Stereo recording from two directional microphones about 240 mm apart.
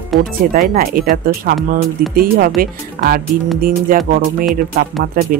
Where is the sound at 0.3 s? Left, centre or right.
Right.